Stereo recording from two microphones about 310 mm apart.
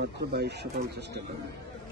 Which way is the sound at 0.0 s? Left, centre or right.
Right.